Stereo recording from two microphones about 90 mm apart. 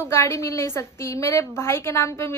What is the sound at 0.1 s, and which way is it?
Speech, 30° left (ahead or behind).